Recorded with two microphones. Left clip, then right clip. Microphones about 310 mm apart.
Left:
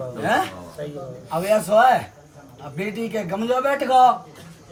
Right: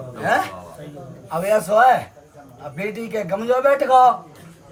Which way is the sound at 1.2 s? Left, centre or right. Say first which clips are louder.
Right 1 dB; centre.